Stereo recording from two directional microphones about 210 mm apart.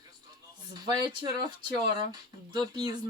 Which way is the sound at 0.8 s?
20° right (ahead or behind).